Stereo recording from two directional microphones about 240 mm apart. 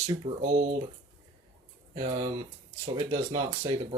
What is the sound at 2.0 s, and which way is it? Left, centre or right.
Speech, right.